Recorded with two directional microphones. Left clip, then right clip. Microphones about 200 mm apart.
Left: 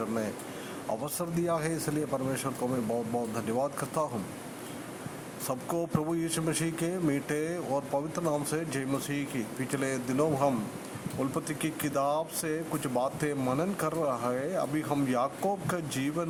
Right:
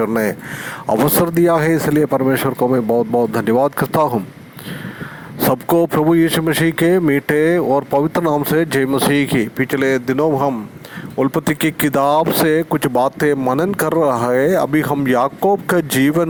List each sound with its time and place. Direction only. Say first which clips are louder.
0.0 s speech: right 16 dB; 45° right (ahead or behind)
5.6 s speech: right 17 dB; 45° right (ahead or behind)